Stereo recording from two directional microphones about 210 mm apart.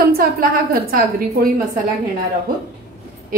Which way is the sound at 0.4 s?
45° right (ahead or behind).